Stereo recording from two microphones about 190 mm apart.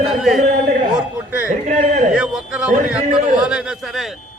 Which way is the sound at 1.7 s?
40° right (ahead or behind).